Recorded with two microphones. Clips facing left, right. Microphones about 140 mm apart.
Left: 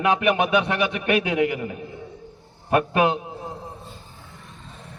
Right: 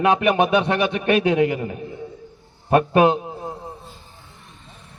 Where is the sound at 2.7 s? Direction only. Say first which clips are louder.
Right 4 dB; 25° right (ahead or behind).